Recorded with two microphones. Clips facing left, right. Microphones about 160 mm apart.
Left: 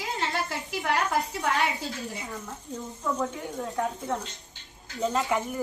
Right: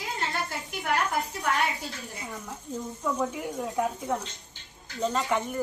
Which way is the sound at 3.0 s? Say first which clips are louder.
Even; 5° right (ahead or behind).